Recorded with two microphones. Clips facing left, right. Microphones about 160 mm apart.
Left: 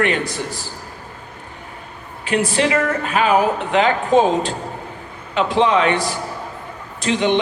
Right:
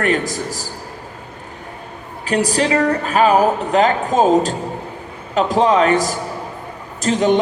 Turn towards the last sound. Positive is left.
turn(degrees=-45)  # may be behind; listen again after turning